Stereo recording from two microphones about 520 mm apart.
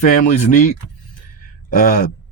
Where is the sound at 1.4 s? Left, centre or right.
Centre.